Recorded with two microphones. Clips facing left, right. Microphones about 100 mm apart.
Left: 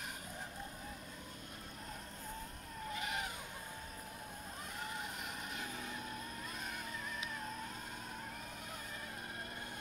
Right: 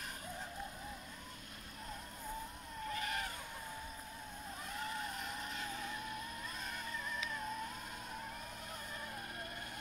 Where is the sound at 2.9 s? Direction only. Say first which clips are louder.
Right 1 dB; 15° left (ahead or behind).